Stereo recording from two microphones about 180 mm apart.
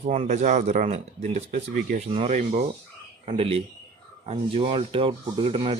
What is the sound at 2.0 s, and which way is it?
Speech, 35° right (ahead or behind).